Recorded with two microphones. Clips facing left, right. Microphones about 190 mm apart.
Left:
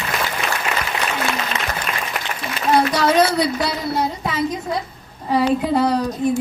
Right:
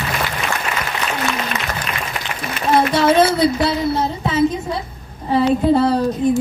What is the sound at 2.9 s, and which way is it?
Speech, 25° right (ahead or behind).